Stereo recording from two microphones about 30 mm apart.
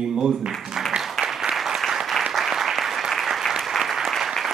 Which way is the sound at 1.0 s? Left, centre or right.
Centre.